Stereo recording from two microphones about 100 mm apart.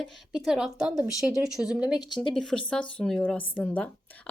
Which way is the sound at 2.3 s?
5° left (ahead or behind).